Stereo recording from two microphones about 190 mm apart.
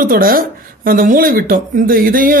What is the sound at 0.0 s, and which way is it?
Speech, 45° right (ahead or behind).